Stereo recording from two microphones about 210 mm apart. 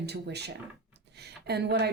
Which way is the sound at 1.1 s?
50° right (ahead or behind).